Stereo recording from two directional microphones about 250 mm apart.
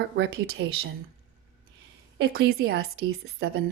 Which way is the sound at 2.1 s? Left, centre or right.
Right.